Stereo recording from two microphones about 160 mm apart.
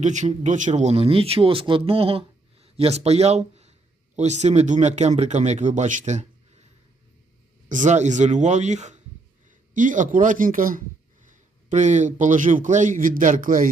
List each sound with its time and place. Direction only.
0.0 s a man's voice: 50° right (ahead or behind)
7.7 s a man's voice: 50° right (ahead or behind)
11.3 s a man's voice: 50° right (ahead or behind)